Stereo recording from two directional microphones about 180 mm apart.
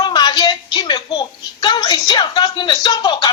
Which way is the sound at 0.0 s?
25° left (ahead or behind).